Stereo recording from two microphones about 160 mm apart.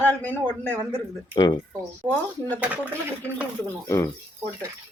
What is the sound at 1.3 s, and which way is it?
Speech, 30° left (ahead or behind).